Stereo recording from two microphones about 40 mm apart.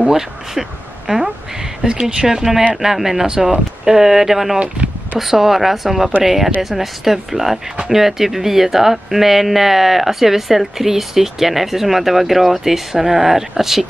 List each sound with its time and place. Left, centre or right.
0.1 s speech: centre
4.6 s a sound: right
5.2 s speech: centre